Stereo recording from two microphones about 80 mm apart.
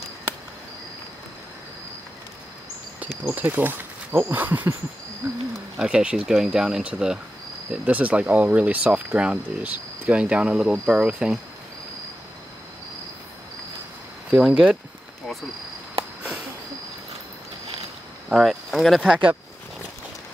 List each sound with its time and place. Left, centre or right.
3.3 s speech: centre
14.3 s speech: centre
18.3 s speech: centre